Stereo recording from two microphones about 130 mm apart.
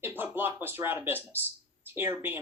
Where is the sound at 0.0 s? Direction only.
15° right (ahead or behind).